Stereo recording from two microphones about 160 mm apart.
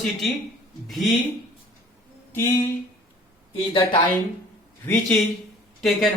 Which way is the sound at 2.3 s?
15° left (ahead or behind).